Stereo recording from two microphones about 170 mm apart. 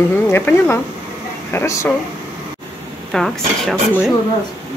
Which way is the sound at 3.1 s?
5° left (ahead or behind).